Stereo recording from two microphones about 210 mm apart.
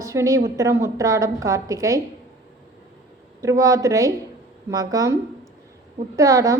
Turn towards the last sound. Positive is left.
turn(degrees=-15)  # may be behind; listen again after turning